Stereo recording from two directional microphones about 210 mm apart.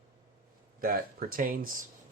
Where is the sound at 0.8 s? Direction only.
45° right (ahead or behind).